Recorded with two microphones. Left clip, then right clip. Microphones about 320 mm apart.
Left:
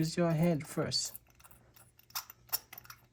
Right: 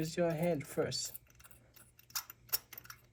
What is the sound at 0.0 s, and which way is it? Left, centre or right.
Speech, left.